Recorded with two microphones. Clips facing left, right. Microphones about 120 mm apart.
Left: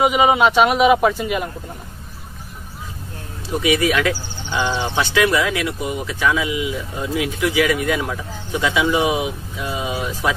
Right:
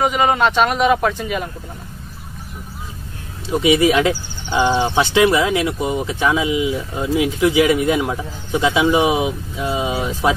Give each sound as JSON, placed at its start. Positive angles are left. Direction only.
{"t": 0.0, "sound": "a man's voice", "side_deg": 5}
{"t": 3.5, "sound": "speech", "side_deg": -20}